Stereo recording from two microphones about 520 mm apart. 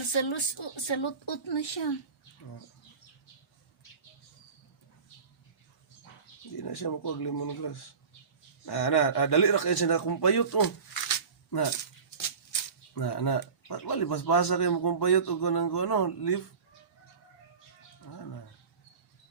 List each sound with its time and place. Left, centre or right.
0.0 s speech: left
6.6 s speech: left
12.9 s speech: left